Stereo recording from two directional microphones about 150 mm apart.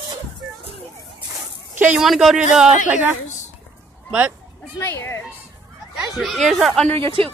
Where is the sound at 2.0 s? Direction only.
Centre (ahead or behind).